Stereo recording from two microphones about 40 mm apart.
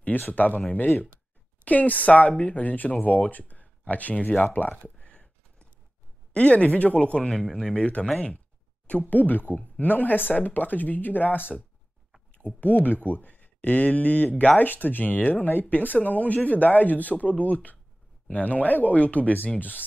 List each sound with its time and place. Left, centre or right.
0.0 s speech: left
4.9 s a sound: left
6.3 s speech: left
7.2 s speech: centre
7.7 s speech: left
12.5 s speech: left